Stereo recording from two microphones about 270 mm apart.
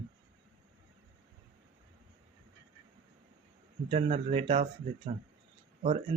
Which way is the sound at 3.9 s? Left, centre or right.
Right.